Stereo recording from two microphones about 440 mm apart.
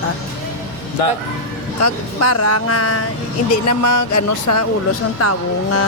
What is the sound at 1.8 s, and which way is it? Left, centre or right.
Speech, left.